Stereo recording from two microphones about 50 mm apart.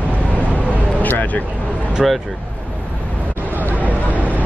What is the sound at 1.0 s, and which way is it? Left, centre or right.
Vehicle, left.